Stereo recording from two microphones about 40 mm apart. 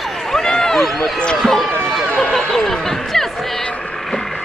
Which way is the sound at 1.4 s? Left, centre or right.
Centre.